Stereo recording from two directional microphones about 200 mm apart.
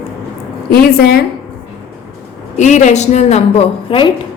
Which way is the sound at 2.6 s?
35° left (ahead or behind).